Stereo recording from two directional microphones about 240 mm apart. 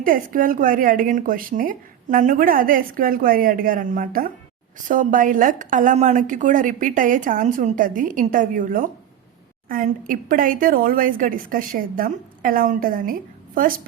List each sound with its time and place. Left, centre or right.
0.0 s a woman's voice: right